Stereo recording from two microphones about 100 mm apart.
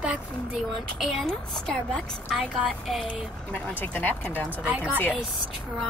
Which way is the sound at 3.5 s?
20° left (ahead or behind).